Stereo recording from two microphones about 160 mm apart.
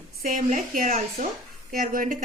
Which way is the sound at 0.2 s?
55° right (ahead or behind).